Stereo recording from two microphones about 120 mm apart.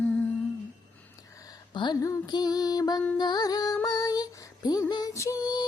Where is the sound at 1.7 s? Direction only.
35° left (ahead or behind).